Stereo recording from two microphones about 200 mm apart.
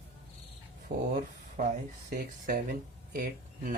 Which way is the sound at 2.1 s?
45° right (ahead or behind).